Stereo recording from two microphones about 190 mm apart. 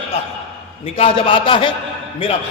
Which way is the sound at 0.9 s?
30° left (ahead or behind).